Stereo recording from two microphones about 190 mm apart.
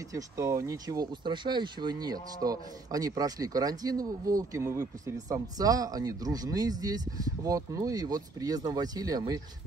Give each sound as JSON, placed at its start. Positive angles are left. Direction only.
{"t": 0.1, "sound": "speech", "side_deg": -15}